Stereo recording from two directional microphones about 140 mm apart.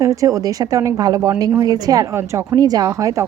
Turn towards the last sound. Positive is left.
turn(degrees=-25)  # may be behind; listen again after turning